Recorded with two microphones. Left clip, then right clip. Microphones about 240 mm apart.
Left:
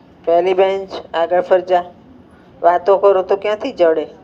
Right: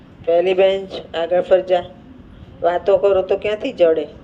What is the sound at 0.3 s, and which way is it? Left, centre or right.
Speech, left.